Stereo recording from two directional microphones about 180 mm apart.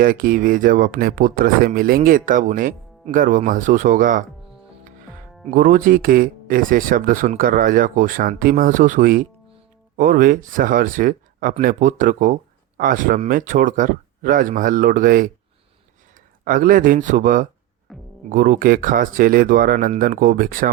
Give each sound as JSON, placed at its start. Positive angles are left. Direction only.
{"t": 0.0, "sound": "speech", "side_deg": -50}
{"t": 5.5, "sound": "speech", "side_deg": -50}
{"t": 16.4, "sound": "speech", "side_deg": -50}
{"t": 17.9, "sound": "music", "side_deg": 0}
{"t": 18.3, "sound": "speech", "side_deg": -50}